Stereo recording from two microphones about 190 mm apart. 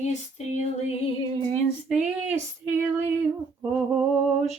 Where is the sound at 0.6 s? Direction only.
35° left (ahead or behind).